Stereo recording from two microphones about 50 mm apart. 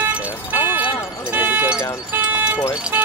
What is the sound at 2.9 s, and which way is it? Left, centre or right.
Speech, right.